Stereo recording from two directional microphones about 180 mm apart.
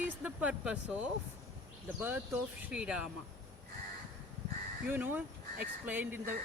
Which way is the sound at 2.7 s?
5° right (ahead or behind).